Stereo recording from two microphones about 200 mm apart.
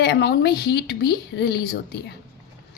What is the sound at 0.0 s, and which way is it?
A woman's voice, 55° left (ahead or behind).